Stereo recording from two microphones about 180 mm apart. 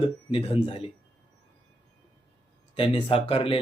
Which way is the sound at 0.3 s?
30° left (ahead or behind).